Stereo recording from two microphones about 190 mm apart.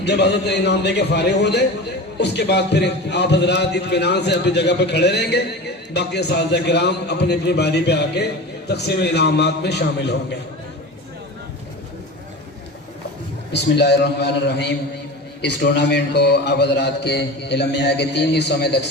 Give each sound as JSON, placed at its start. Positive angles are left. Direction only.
{"t": 0.0, "sound": "a man's voice", "side_deg": 60}
{"t": 13.5, "sound": "a man's voice", "side_deg": 65}